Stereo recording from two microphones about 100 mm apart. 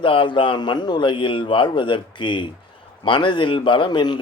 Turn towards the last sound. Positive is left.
turn(degrees=50)  # may be behind; listen again after turning